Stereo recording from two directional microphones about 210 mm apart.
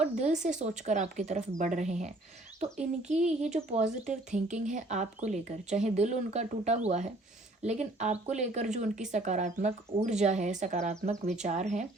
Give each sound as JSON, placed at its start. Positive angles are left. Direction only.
{"t": 0.0, "sound": "speech", "side_deg": -35}